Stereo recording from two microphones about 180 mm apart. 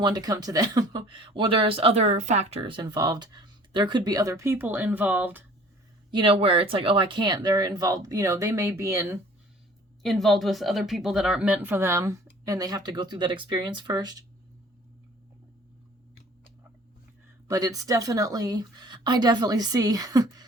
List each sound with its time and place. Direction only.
0.0 s speech: 20° right (ahead or behind)
6.1 s speech: 30° right (ahead or behind)
10.0 s speech: centre (ahead or behind); by 14.2 s 20° right (ahead or behind)
17.5 s speech: 20° right (ahead or behind)